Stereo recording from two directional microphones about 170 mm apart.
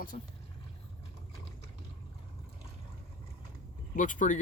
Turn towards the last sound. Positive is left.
turn(degrees=45)  # may be behind; listen again after turning